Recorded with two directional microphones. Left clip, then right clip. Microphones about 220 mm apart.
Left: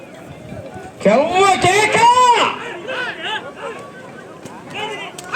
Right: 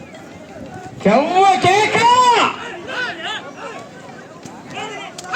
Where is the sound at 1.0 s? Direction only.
45° left (ahead or behind).